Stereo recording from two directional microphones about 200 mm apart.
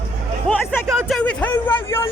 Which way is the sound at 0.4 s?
5° left (ahead or behind).